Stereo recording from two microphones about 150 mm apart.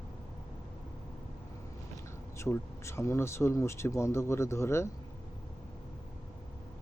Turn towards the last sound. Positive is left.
turn(degrees=20)  # may be behind; listen again after turning